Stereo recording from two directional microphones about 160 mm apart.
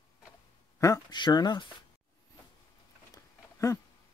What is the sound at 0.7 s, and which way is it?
Speech, 20° left (ahead or behind).